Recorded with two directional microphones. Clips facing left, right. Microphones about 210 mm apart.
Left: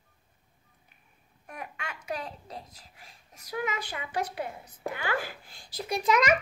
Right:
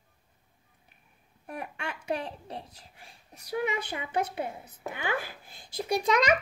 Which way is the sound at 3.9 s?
25° right (ahead or behind).